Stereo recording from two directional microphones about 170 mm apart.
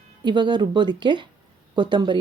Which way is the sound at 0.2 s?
25° right (ahead or behind).